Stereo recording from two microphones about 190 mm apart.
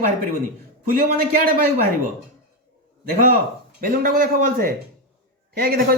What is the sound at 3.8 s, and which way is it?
A woman's voice, 50° right (ahead or behind).